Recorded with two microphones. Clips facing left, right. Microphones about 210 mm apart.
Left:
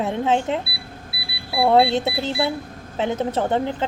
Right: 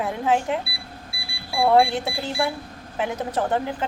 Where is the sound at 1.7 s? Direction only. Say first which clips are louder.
Left 3 dB; 25° left (ahead or behind).